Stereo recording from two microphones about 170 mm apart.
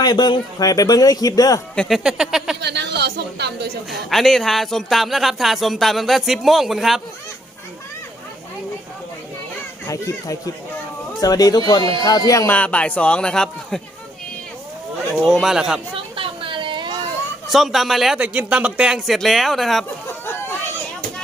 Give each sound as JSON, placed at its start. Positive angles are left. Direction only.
{"t": 0.0, "sound": "speech", "side_deg": 25}
{"t": 1.7, "sound": "speech", "side_deg": 5}
{"t": 2.6, "sound": "a woman's voice", "side_deg": -80}
{"t": 4.1, "sound": "speech", "side_deg": 0}
{"t": 9.8, "sound": "speech", "side_deg": 20}
{"t": 15.3, "sound": "speech", "side_deg": 0}
{"t": 16.0, "sound": "a sound", "side_deg": -30}
{"t": 17.5, "sound": "speech", "side_deg": 0}